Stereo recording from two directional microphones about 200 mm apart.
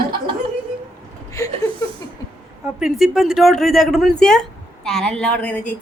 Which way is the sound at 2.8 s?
Centre (ahead or behind).